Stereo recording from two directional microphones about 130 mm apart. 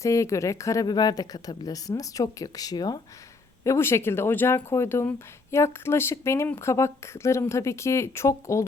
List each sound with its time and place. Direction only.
0.0 s speech: 25° left (ahead or behind)
3.6 s speech: 20° left (ahead or behind)